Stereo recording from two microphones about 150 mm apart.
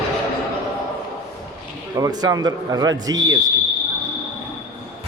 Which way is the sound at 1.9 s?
25° right (ahead or behind).